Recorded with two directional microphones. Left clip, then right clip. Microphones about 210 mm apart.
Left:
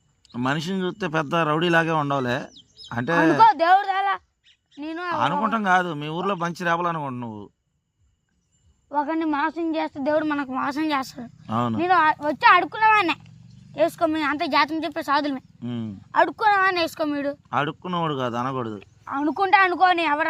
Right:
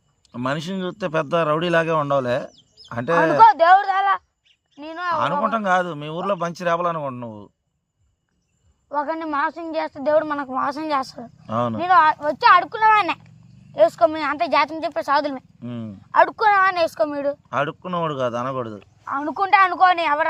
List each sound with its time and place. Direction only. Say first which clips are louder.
0.3 s a man's voice: even; 5° right (ahead or behind)
3.4 s a man's voice: right 5 dB; 20° right (ahead or behind)
5.1 s a man's voice: right 2 dB; centre (ahead or behind)
8.9 s a man's voice: even; 25° right (ahead or behind)
11.4 s a man's voice: right 2 dB; 5° right (ahead or behind)
11.8 s a man's voice: right 4 dB; 20° right (ahead or behind)
12.9 s speech: right 2 dB; 15° right (ahead or behind)
15.6 s a man's voice: left 1 dB; centre (ahead or behind)
16.1 s a man's voice: right 3 dB; 25° right (ahead or behind)
17.5 s a man's voice: right 1 dB; 5° right (ahead or behind)
18.8 s a man's voice: right 1 dB; 25° right (ahead or behind)